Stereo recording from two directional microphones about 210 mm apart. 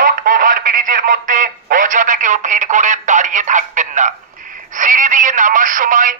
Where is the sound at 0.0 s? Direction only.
40° right (ahead or behind).